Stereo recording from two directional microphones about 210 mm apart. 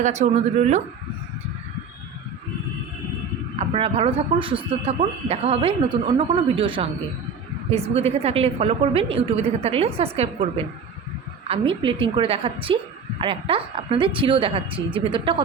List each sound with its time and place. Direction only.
0.0 s speech: 35° right (ahead or behind)
3.6 s speech: 30° right (ahead or behind)
11.4 s speech: 25° right (ahead or behind)